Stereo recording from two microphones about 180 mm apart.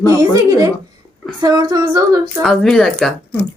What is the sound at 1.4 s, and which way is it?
Speech, 20° right (ahead or behind).